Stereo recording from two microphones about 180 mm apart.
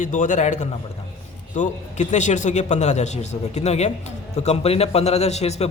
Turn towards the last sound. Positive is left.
turn(degrees=35)  # may be behind; listen again after turning